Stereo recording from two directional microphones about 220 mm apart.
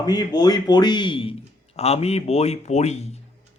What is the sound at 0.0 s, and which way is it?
A man's voice, 20° left (ahead or behind).